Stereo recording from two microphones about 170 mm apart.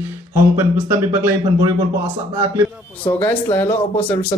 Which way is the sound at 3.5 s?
10° left (ahead or behind).